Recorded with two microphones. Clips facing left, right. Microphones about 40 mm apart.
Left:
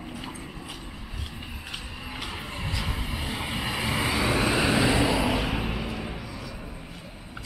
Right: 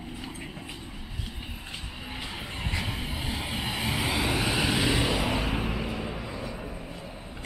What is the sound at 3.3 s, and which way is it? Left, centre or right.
Vehicle, centre.